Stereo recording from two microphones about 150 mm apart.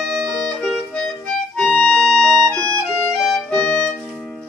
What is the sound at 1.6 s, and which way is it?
Music, 5° left (ahead or behind).